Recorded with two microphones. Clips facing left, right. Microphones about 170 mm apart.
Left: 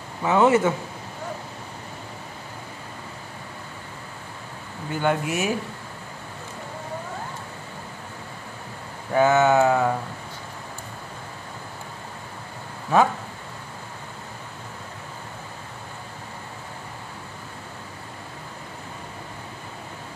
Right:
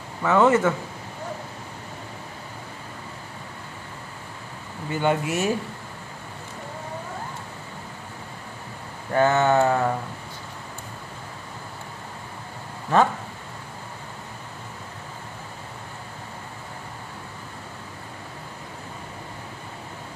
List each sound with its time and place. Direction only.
0.2 s speech: 20° left (ahead or behind)
4.9 s speech: centre (ahead or behind)
9.1 s speech: 5° left (ahead or behind)